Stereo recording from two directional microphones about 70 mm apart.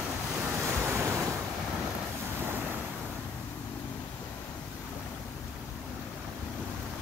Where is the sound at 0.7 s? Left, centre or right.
Right.